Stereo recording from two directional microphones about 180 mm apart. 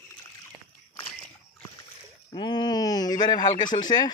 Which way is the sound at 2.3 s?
25° left (ahead or behind).